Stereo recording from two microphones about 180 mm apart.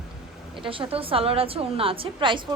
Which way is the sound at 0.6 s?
30° right (ahead or behind).